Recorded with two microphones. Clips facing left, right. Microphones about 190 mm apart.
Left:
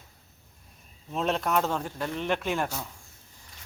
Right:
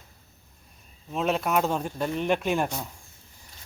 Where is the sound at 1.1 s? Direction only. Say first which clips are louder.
Right 2 dB; 5° right (ahead or behind).